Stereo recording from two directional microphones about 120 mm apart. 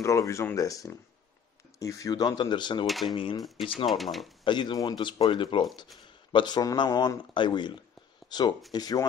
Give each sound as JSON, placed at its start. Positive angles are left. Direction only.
{"t": 0.0, "sound": "a man's voice", "side_deg": 25}
{"t": 2.9, "sound": "speech", "side_deg": 0}
{"t": 4.5, "sound": "a man's voice", "side_deg": 40}